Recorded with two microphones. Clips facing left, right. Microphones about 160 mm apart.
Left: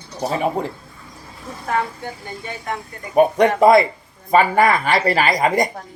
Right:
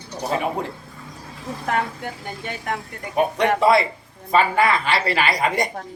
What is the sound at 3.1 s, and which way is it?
A woman's voice, 45° left (ahead or behind).